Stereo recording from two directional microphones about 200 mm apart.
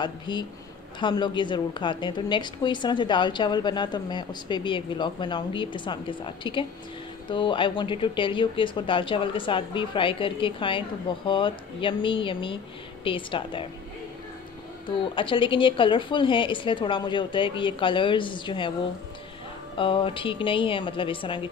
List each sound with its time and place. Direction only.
0.0 s a woman's voice: 20° left (ahead or behind)
14.9 s a woman's voice: 25° left (ahead or behind)
19.8 s a woman's voice: 25° left (ahead or behind)